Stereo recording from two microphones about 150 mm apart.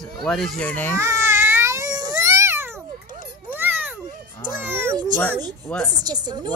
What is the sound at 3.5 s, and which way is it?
Cat, 15° right (ahead or behind).